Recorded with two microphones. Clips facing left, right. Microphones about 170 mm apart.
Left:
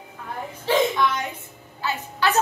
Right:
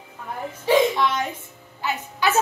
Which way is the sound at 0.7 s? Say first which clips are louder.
Right 3 dB; 15° right (ahead or behind).